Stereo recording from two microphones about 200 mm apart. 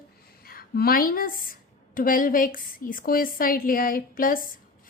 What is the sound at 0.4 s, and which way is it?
A woman's voice, 50° left (ahead or behind).